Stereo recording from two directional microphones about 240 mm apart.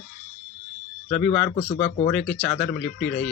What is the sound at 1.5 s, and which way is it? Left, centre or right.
Speech, left.